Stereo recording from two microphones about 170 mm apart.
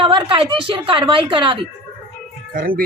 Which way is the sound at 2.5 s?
55° right (ahead or behind).